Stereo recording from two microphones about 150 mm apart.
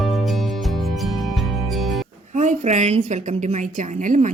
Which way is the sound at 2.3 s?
50° right (ahead or behind).